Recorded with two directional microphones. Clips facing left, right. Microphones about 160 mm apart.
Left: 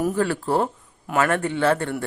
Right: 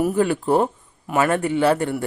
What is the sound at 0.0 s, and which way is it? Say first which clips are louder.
A man's voice: right 3 dB; 15° right (ahead or behind).